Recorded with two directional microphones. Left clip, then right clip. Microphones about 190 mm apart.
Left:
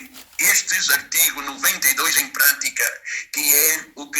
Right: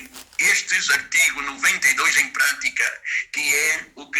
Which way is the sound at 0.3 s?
20° left (ahead or behind).